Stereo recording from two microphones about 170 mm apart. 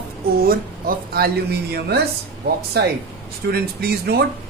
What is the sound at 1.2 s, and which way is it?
Speech, 65° right (ahead or behind).